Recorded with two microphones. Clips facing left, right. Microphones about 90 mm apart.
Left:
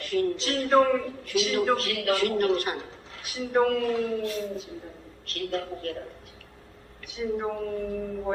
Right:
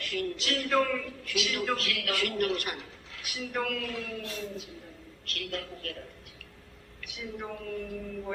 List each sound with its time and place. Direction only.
0.0 s a woman's voice: 30° left (ahead or behind)
7.0 s a woman's voice: 30° left (ahead or behind)